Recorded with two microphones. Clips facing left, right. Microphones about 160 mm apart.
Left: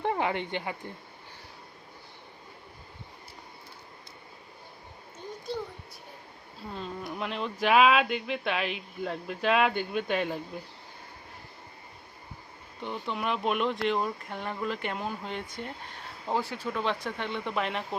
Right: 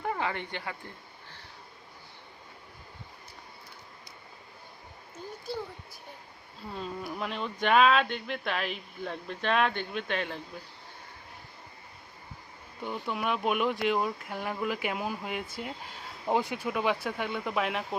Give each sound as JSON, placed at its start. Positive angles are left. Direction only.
{"t": 0.0, "sound": "speech", "side_deg": 25}
{"t": 6.7, "sound": "speech", "side_deg": 0}
{"t": 12.8, "sound": "speech", "side_deg": -5}